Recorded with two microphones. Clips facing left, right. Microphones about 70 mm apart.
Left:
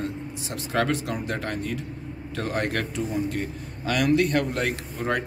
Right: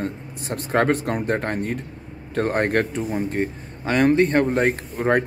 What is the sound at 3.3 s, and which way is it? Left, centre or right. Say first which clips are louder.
Speech: right 5 dB; right.